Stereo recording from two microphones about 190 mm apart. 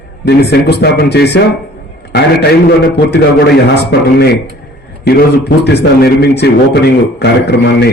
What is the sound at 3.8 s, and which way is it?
Speech, 60° left (ahead or behind).